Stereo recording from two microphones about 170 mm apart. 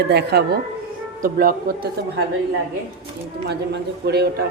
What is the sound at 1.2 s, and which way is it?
Speech, 60° right (ahead or behind).